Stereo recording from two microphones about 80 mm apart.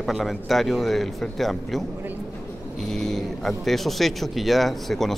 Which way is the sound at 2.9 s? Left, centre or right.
Centre.